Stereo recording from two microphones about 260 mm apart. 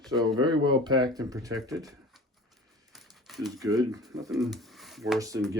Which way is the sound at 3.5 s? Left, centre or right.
Centre.